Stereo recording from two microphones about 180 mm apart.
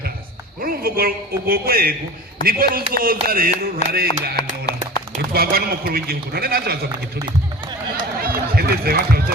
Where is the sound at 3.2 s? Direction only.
55° right (ahead or behind).